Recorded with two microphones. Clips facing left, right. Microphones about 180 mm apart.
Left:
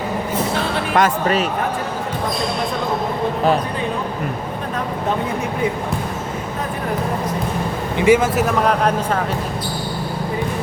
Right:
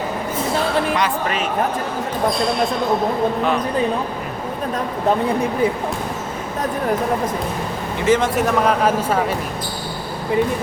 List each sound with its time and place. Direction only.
0.9 s speech: 40° left (ahead or behind)
7.9 s speech: 10° left (ahead or behind)